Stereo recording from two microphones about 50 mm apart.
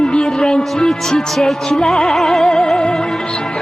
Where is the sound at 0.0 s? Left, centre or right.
Centre.